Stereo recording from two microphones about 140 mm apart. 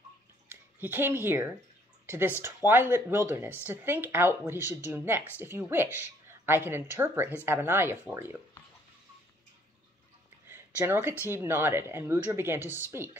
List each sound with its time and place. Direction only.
0.5 s a woman's voice: 15° right (ahead or behind)
10.5 s a sound: 15° right (ahead or behind)
11.2 s a woman's voice: 15° right (ahead or behind)